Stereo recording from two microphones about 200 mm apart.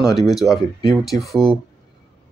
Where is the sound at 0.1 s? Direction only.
Centre (ahead or behind).